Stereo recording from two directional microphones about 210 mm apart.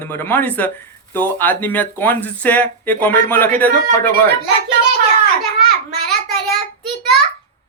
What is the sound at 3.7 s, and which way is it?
Speech, 40° right (ahead or behind).